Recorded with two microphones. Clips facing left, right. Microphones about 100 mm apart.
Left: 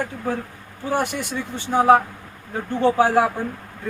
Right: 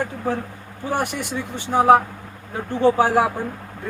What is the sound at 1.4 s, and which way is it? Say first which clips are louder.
Speech: even; 5° right (ahead or behind).